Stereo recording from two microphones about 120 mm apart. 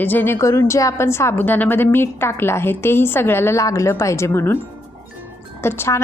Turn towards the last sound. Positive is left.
turn(degrees=20)  # may be behind; listen again after turning